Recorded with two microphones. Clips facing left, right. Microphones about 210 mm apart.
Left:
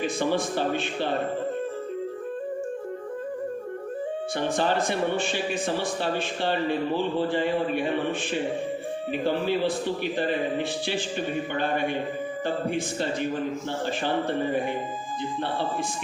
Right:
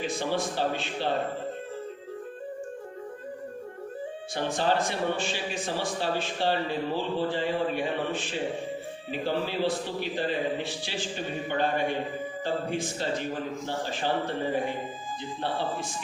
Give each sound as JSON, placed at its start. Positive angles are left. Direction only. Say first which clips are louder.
{"t": 0.2, "sound": "a man's voice", "louder": "left 3 dB", "side_deg": 55}
{"t": 4.5, "sound": "a man's voice", "louder": "left 1 dB", "side_deg": 55}
{"t": 10.0, "sound": "a man's voice", "louder": "even", "side_deg": 55}